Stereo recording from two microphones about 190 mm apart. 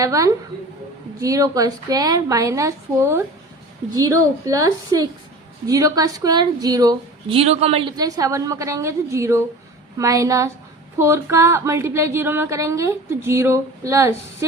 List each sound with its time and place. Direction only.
0.0 s a woman's voice: 15° right (ahead or behind)